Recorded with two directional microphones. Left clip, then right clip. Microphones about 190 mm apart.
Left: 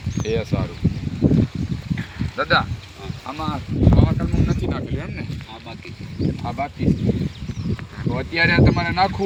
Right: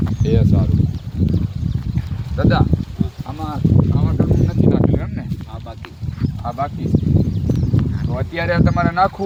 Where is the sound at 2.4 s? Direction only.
40° right (ahead or behind).